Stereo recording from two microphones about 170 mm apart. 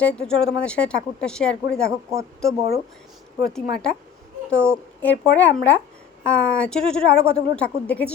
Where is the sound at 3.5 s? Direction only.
5° left (ahead or behind).